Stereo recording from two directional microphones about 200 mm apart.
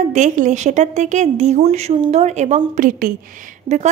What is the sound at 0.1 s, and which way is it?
A woman's voice, 35° right (ahead or behind).